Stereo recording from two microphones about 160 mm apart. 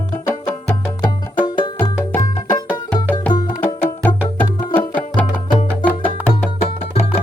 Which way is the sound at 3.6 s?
15° left (ahead or behind).